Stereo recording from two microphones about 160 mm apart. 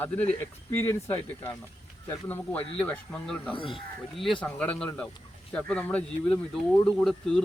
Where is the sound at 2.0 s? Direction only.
10° left (ahead or behind).